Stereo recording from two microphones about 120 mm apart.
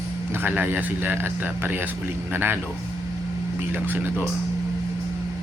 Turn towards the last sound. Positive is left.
turn(degrees=-15)  # may be behind; listen again after turning